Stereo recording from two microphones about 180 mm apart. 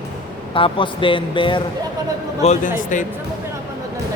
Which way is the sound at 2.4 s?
40° left (ahead or behind).